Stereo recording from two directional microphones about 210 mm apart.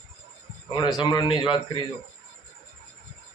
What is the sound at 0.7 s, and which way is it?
Speech, 20° left (ahead or behind).